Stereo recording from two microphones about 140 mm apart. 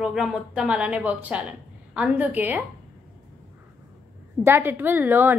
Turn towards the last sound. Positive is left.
turn(degrees=-15)  # may be behind; listen again after turning